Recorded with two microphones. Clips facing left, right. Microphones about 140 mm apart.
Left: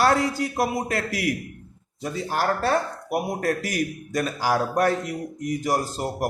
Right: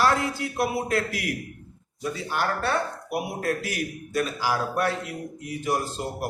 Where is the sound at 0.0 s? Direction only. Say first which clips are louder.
Left 3 dB; 40° left (ahead or behind).